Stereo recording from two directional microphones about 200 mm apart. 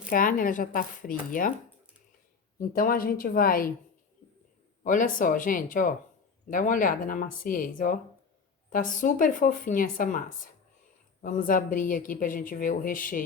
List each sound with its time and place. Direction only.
0.1 s speech: 45° left (ahead or behind)
2.6 s speech: 45° left (ahead or behind)
4.8 s speech: 40° left (ahead or behind)